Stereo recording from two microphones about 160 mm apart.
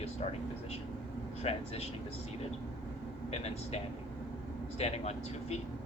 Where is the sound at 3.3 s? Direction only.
40° left (ahead or behind).